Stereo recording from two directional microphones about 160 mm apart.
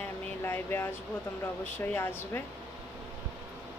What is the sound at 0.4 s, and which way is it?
Vehicle, 15° left (ahead or behind).